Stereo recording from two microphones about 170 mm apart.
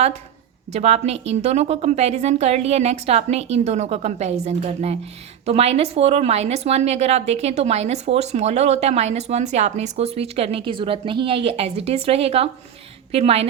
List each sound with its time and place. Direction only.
0.7 s a woman's voice: 40° right (ahead or behind)